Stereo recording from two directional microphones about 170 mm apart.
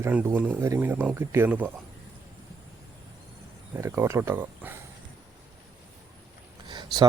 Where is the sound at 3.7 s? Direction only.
15° right (ahead or behind).